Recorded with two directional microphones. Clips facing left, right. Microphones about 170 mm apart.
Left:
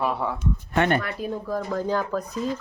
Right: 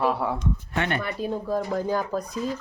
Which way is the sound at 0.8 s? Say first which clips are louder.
Left 6 dB; 40° left (ahead or behind).